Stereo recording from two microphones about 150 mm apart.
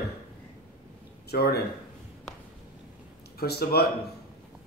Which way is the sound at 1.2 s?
90° left.